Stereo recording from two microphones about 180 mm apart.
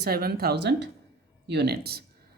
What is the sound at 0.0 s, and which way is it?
Speech, 60° right (ahead or behind).